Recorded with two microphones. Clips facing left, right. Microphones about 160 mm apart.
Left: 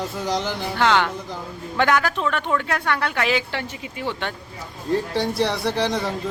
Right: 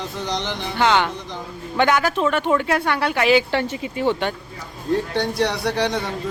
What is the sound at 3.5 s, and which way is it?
Speech, 30° right (ahead or behind).